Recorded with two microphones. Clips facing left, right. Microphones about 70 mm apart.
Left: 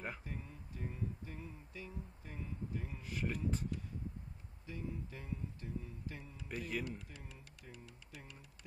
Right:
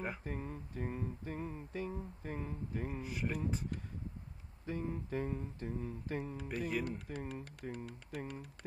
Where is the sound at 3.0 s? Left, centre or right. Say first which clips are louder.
Left 1 dB; centre.